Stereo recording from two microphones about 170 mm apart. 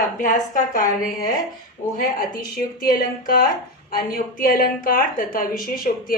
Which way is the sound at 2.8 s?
60° left (ahead or behind).